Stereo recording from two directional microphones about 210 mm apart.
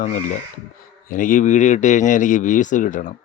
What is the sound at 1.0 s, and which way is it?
Speech, 40° left (ahead or behind).